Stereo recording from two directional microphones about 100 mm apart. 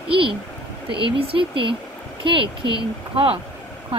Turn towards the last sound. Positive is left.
turn(degrees=-60)  # may be behind; listen again after turning